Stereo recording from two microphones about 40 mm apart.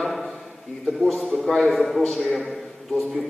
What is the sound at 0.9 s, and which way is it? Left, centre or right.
A man's voice, centre.